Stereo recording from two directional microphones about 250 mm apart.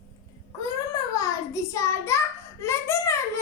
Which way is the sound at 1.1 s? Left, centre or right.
Centre.